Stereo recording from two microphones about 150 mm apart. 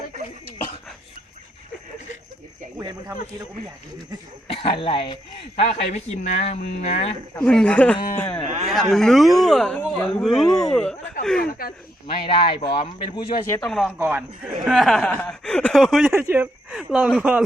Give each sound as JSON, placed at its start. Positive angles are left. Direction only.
{"t": 2.7, "sound": "speech", "side_deg": -20}
{"t": 4.4, "sound": "speech", "side_deg": 35}
{"t": 7.3, "sound": "speech", "side_deg": 5}
{"t": 11.4, "sound": "speech", "side_deg": 80}
{"t": 12.1, "sound": "speech", "side_deg": 35}
{"t": 13.6, "sound": "speech", "side_deg": 0}
{"t": 14.0, "sound": "speech", "side_deg": -10}
{"t": 16.1, "sound": "speech", "side_deg": -15}